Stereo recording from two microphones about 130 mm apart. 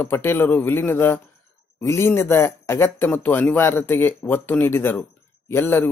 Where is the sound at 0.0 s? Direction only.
15° left (ahead or behind).